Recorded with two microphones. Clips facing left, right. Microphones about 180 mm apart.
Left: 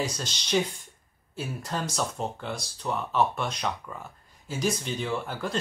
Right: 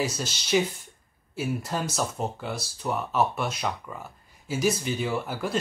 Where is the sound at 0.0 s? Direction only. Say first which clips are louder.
Right 2 dB; 5° right (ahead or behind).